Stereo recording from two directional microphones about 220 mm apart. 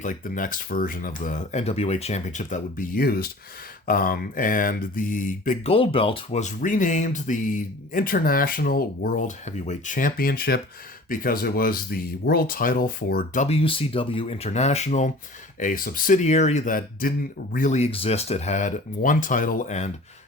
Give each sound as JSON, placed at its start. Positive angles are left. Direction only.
{"t": 0.0, "sound": "mantra", "side_deg": 35}